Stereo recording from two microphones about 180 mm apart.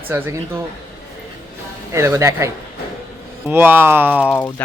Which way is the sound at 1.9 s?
15° right (ahead or behind).